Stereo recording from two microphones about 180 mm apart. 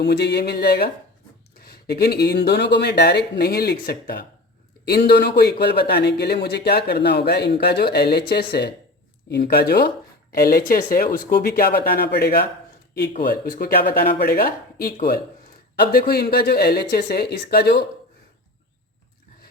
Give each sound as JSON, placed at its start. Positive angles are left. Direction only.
{"t": 0.0, "sound": "speech", "side_deg": 65}